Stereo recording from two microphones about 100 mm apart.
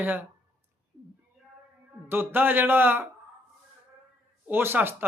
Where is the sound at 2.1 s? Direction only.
20° right (ahead or behind).